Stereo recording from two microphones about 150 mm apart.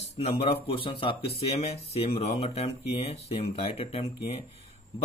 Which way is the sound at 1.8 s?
45° left (ahead or behind).